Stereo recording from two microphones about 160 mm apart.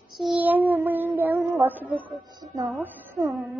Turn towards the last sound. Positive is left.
turn(degrees=0)  # may be behind; listen again after turning